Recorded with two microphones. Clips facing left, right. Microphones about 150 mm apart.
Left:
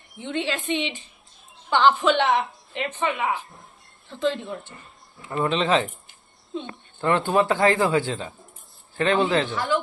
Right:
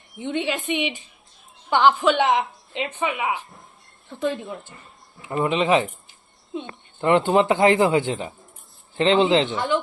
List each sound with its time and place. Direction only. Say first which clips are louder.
0.2 s a woman's voice: right 2 dB; 15° right (ahead or behind)